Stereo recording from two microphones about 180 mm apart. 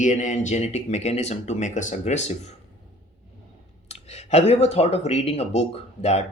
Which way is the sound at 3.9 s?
35° left (ahead or behind).